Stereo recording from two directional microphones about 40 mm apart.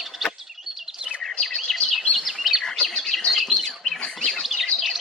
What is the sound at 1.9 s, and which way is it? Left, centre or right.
Bird, centre.